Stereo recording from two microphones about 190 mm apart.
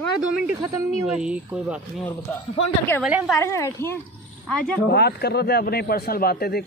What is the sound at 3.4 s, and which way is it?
Speech, 15° left (ahead or behind).